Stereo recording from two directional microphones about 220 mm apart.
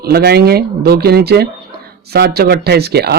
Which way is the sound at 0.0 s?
45° right (ahead or behind).